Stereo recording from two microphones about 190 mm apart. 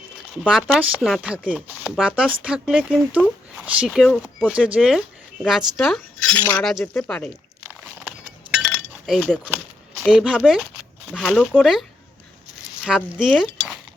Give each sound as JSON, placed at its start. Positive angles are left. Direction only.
{"t": 0.4, "sound": "speech", "side_deg": -5}
{"t": 6.3, "sound": "speech", "side_deg": 20}
{"t": 6.6, "sound": "speech", "side_deg": 0}
{"t": 7.6, "sound": "chink", "side_deg": -5}
{"t": 10.0, "sound": "speech", "side_deg": 0}
{"t": 13.1, "sound": "speech", "side_deg": 0}